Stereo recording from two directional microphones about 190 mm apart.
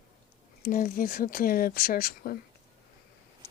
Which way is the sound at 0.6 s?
45° left (ahead or behind).